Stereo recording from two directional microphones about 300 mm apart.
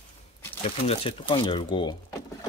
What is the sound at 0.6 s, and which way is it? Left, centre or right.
Speech, centre.